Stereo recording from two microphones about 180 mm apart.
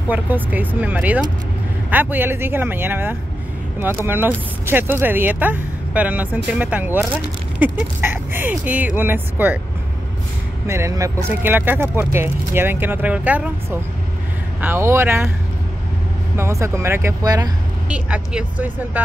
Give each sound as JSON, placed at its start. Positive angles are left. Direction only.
{"t": 0.1, "sound": "speech", "side_deg": -10}
{"t": 10.7, "sound": "speech", "side_deg": -15}
{"t": 16.3, "sound": "speech", "side_deg": -15}
{"t": 17.8, "sound": "speech", "side_deg": -5}